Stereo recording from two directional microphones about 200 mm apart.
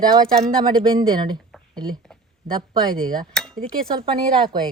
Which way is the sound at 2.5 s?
20° right (ahead or behind).